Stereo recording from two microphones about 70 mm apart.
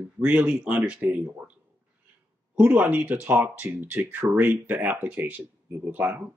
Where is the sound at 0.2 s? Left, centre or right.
Centre.